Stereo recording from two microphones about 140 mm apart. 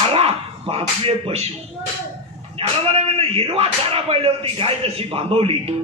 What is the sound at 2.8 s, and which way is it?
Speech, 45° right (ahead or behind).